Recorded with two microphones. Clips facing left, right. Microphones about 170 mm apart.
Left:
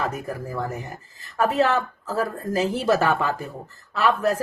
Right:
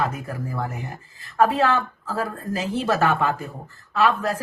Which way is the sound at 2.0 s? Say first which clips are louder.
Left 2 dB; 40° left (ahead or behind).